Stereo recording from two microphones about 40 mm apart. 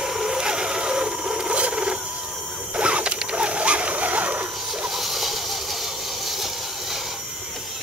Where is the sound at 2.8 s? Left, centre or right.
Right.